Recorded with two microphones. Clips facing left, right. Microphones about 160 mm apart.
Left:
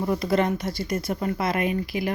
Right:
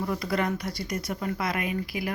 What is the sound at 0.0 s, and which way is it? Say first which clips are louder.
A woman's voice: left 5 dB; 25° left (ahead or behind).